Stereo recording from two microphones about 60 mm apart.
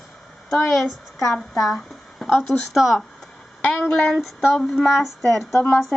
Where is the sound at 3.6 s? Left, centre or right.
Centre.